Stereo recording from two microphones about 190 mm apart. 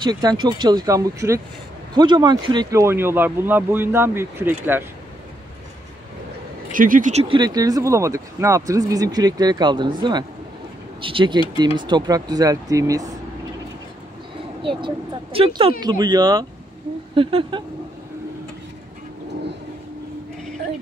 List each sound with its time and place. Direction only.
0.0 s speech: 20° right (ahead or behind)
6.7 s speech: 45° right (ahead or behind); by 13.1 s 20° right (ahead or behind)
15.3 s speech: 30° right (ahead or behind)